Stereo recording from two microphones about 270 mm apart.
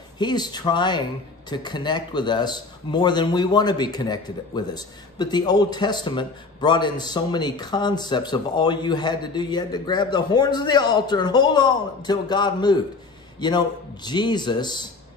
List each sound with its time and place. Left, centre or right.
0.2 s speech: centre